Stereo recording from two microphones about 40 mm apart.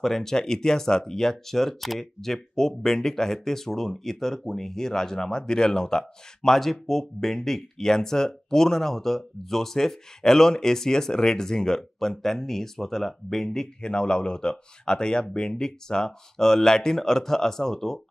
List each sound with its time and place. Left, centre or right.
0.0 s speech: centre
13.7 s speech: left